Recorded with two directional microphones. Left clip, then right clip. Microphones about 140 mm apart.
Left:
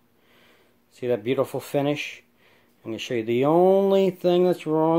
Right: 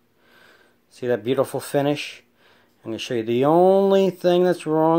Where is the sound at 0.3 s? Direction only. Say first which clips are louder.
Right 5 dB; 30° right (ahead or behind).